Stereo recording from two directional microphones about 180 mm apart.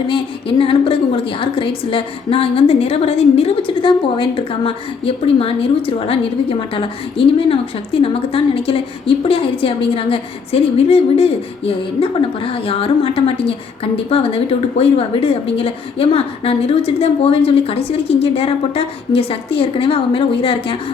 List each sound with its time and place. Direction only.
0.1 s a woman's voice: 30° left (ahead or behind)